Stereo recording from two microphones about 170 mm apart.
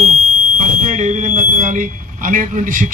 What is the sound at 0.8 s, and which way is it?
Speech, 45° right (ahead or behind).